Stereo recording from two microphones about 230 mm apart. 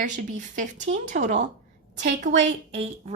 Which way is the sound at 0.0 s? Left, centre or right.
Right.